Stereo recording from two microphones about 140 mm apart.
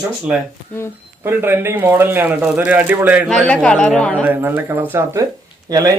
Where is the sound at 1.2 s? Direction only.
15° right (ahead or behind).